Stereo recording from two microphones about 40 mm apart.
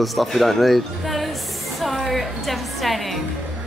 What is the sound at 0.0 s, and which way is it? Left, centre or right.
Speech, centre.